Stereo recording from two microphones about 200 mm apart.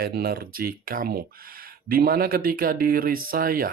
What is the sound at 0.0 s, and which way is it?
Speech, 50° right (ahead or behind).